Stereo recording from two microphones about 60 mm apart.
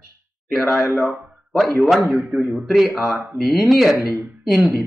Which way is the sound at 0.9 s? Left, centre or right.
Right.